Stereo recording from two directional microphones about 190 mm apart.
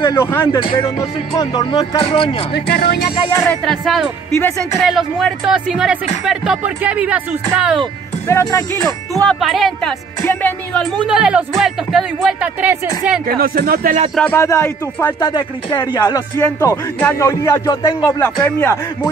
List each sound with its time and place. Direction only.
0.0 s speech: 15° left (ahead or behind)
2.5 s speech: 60° left (ahead or behind)
3.3 s speech: 15° left (ahead or behind)
3.6 s speech: centre (ahead or behind)
8.3 s speech: 15° left (ahead or behind)
9.3 s speech: centre (ahead or behind)
13.4 s speech: 50° right (ahead or behind)
14.1 s speech: 10° left (ahead or behind)
15.1 s speech: 25° left (ahead or behind)